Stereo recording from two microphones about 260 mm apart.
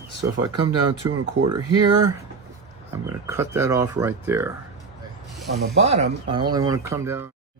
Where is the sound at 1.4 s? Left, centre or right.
Right.